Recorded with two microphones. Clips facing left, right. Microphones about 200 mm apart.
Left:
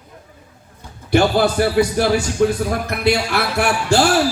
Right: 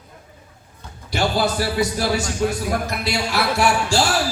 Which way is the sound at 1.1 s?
55° left (ahead or behind).